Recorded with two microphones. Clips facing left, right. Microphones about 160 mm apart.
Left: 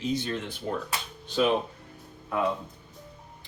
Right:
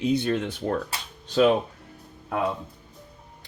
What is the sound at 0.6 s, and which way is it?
Speech, 70° right (ahead or behind).